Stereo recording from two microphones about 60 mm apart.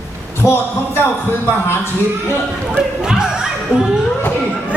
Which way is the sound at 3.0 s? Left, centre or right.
Centre.